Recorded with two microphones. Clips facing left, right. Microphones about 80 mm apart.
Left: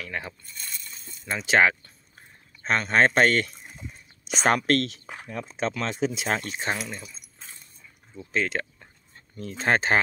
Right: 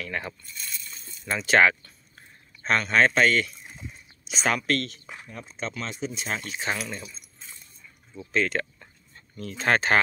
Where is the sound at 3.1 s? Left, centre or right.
Left.